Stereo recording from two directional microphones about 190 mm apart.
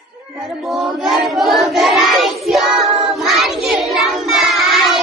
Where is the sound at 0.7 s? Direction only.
Centre (ahead or behind).